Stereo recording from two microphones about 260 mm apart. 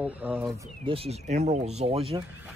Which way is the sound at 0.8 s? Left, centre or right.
Right.